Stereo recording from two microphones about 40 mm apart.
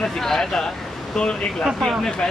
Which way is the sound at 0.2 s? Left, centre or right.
Centre.